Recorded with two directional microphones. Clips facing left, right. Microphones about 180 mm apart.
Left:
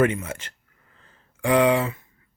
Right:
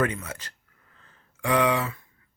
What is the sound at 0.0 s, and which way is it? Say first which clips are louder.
Speech: left 6 dB; 25° left (ahead or behind).